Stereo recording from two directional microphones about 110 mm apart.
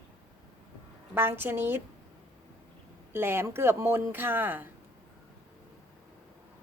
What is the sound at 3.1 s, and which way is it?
Speech, 20° right (ahead or behind).